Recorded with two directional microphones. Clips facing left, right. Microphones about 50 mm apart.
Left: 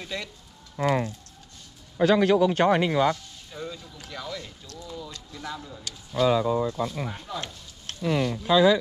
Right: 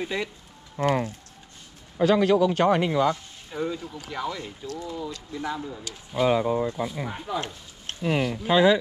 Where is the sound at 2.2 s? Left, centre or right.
Left.